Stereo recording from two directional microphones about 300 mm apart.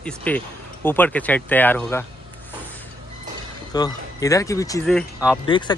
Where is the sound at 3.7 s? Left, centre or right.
Centre.